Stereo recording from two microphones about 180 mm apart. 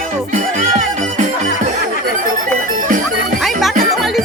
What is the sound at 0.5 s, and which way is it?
Music, 45° right (ahead or behind).